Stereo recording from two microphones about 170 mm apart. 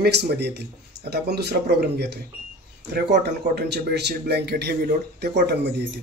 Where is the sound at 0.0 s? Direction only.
75° right (ahead or behind).